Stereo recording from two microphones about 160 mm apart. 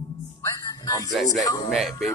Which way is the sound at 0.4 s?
20° left (ahead or behind).